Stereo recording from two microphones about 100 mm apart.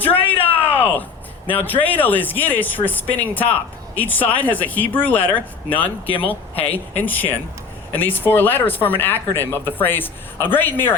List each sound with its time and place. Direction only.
0.4 s a sound: 20° left (ahead or behind)
1.5 s speech: 20° left (ahead or behind)
6.1 s speech: 65° left (ahead or behind)
6.6 s speech: 20° left (ahead or behind)